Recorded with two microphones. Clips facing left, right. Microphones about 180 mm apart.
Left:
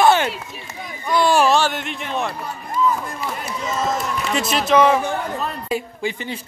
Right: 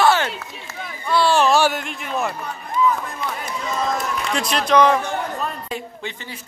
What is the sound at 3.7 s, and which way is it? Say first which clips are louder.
A man's voice: left 1 dB; 5° left (ahead or behind).